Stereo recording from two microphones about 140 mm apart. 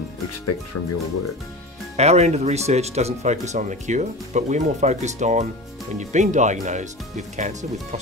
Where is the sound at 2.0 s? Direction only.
50° right (ahead or behind).